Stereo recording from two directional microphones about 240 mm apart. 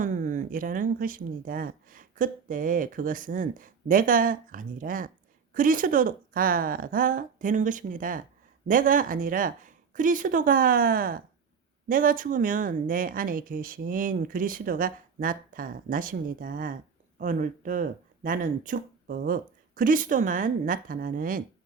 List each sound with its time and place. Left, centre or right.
0.0 s speech: right